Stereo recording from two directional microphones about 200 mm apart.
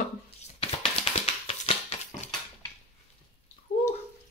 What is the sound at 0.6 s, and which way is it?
Tap, 30° left (ahead or behind).